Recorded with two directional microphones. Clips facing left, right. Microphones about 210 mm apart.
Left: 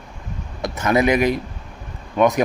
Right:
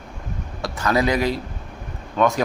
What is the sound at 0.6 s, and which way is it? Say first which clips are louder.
Speech: left 3 dB; 20° left (ahead or behind).